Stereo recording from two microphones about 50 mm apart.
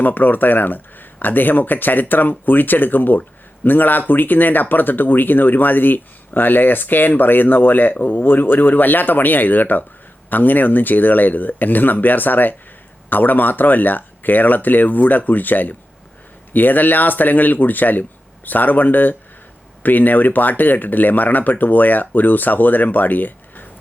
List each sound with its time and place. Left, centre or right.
0.0 s speech: left